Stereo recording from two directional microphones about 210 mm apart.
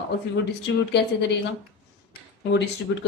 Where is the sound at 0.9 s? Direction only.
55° left (ahead or behind).